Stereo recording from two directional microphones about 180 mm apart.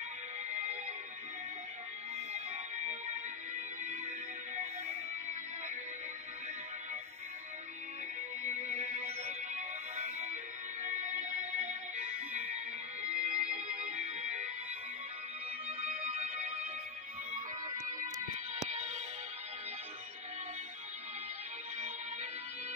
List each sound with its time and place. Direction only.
0.5 s music: 40° right (ahead or behind)
2.1 s music: 40° right (ahead or behind)
8.4 s music: 40° right (ahead or behind)
15.8 s music: 40° right (ahead or behind)
18.0 s music: 40° right (ahead or behind)
21.7 s music: 45° right (ahead or behind)